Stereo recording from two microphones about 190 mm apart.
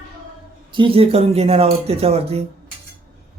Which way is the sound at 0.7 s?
30° right (ahead or behind).